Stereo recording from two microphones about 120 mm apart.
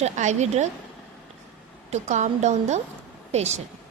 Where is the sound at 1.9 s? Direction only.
80° right.